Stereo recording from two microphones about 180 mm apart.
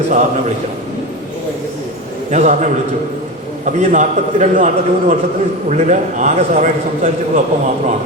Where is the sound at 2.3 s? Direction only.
40° right (ahead or behind).